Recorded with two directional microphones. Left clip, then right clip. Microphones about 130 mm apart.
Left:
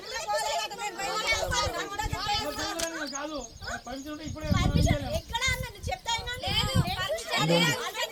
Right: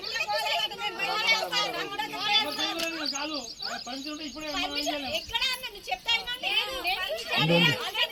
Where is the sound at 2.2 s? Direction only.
10° left (ahead or behind).